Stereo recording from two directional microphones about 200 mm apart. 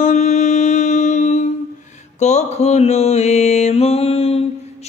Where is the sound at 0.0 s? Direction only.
35° left (ahead or behind).